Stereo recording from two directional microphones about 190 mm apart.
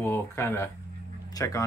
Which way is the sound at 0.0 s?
10° left (ahead or behind).